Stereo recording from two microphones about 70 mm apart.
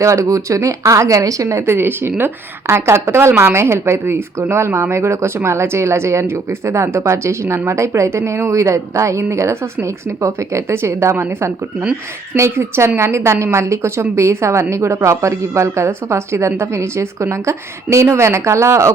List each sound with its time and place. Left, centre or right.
0.0 s a woman's voice: right